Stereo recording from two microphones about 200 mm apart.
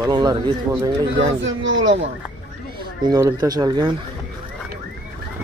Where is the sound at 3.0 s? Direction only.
15° right (ahead or behind).